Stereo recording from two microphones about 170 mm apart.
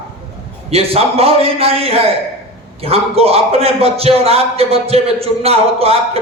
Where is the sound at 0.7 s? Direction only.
35° right (ahead or behind).